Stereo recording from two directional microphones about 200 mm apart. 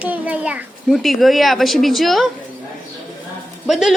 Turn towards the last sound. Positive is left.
turn(degrees=0)  # may be behind; listen again after turning